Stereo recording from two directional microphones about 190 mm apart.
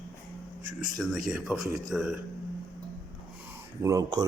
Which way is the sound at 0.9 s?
Centre (ahead or behind).